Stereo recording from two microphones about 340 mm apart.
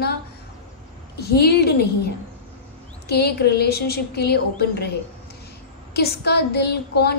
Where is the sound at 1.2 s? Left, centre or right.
Left.